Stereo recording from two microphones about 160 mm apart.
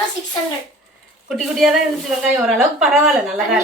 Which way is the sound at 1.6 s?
5° right (ahead or behind).